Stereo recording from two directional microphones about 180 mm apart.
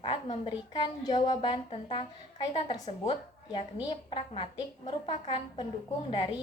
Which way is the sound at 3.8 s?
25° left (ahead or behind).